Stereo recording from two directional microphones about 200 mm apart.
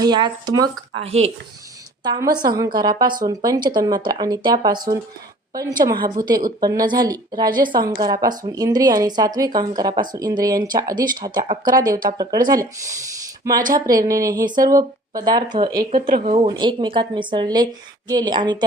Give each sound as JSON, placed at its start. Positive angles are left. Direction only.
{"t": 0.0, "sound": "speech", "side_deg": -20}
{"t": 13.4, "sound": "speech", "side_deg": -15}
{"t": 15.8, "sound": "speech", "side_deg": -45}
{"t": 16.5, "sound": "speech", "side_deg": -20}